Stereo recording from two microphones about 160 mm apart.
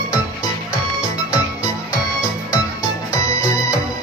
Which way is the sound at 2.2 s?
20° left (ahead or behind).